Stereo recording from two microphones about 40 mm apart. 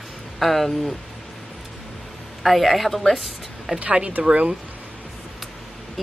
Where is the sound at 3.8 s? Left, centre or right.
Right.